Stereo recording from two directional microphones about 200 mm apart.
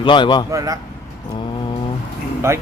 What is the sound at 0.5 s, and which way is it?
Speech, 15° right (ahead or behind).